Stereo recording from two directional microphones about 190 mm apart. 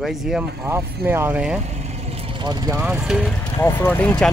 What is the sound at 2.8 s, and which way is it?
Speech, 5° right (ahead or behind).